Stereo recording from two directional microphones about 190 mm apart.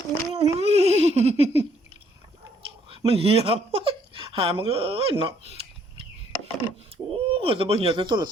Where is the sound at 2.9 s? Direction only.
30° right (ahead or behind).